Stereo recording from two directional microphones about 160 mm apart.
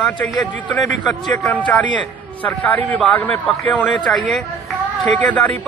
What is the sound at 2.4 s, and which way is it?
Speech, 10° left (ahead or behind).